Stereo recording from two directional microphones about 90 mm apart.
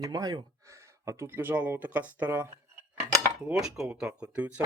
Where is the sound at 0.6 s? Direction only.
35° right (ahead or behind); by 2.4 s 15° right (ahead or behind).